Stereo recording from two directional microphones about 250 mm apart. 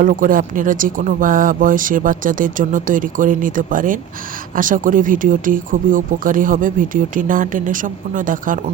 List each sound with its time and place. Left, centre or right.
0.0 s speech: right